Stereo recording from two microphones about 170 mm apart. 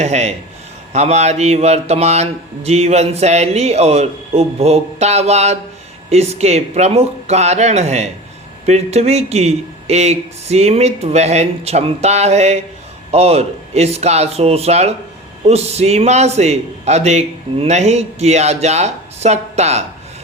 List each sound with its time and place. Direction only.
0.0 s speech: 40° right (ahead or behind)